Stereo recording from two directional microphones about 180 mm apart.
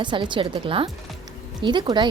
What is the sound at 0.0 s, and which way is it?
A woman's voice, 25° right (ahead or behind).